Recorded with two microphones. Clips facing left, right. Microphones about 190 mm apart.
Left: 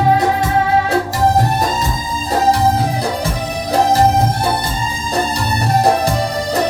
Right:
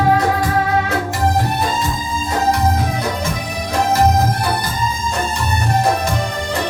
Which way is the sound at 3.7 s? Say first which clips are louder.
Left 3 dB; 35° left (ahead or behind).